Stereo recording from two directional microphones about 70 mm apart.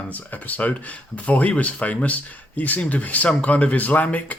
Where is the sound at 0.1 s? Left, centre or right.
Left.